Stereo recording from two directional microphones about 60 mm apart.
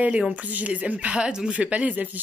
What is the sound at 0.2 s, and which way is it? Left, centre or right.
Speech, centre.